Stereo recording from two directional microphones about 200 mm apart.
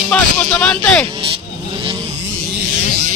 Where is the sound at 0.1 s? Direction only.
5° left (ahead or behind).